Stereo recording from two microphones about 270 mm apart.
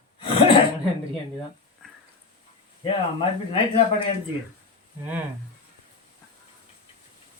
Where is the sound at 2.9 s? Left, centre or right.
Centre.